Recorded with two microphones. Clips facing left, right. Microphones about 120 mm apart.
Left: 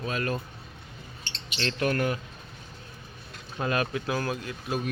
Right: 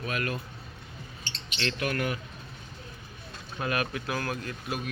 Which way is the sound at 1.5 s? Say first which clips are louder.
Left 3 dB; 30° left (ahead or behind).